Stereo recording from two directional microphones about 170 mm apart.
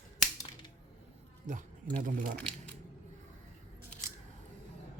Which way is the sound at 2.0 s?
55° right (ahead or behind).